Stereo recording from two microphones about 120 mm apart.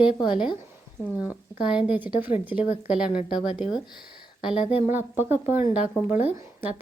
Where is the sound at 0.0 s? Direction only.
45° left (ahead or behind).